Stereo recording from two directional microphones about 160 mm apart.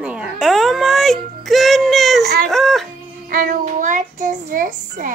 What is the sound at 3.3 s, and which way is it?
Child singing, 55° right (ahead or behind).